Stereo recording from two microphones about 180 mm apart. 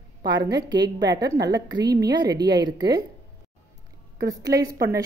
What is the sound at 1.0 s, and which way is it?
Speech, 75° right (ahead or behind).